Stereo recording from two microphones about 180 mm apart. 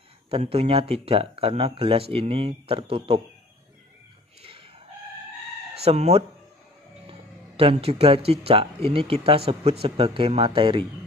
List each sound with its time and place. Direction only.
0.3 s speech: 35° right (ahead or behind)
4.4 s chicken: 30° right (ahead or behind)
5.9 s speech: 35° right (ahead or behind)